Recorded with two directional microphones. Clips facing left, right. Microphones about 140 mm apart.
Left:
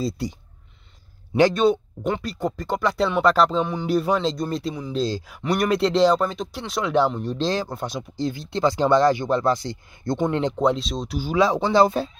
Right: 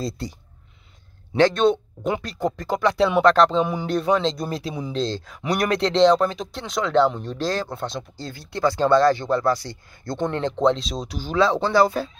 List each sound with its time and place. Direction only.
1.3 s speech: 10° left (ahead or behind)
7.3 s speech: 20° left (ahead or behind)
10.7 s speech: centre (ahead or behind); by 12.1 s 20° left (ahead or behind)